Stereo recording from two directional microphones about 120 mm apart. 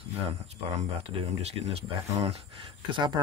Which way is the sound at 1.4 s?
60° right (ahead or behind).